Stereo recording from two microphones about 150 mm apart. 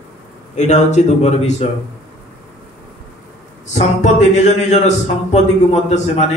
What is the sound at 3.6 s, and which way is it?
Speech, 50° left (ahead or behind).